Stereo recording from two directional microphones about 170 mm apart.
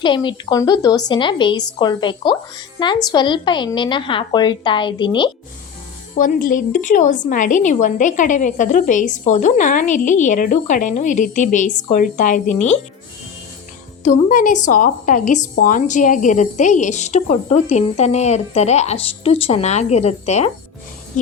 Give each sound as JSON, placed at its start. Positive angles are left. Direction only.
{"t": 0.0, "sound": "a woman's voice", "side_deg": 30}
{"t": 6.1, "sound": "a woman's voice", "side_deg": 55}
{"t": 14.0, "sound": "a woman's voice", "side_deg": 50}